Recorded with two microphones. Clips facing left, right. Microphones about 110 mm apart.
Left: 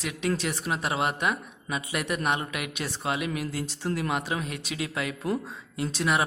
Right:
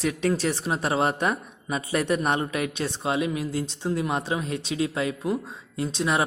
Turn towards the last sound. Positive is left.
turn(degrees=-25)  # may be behind; listen again after turning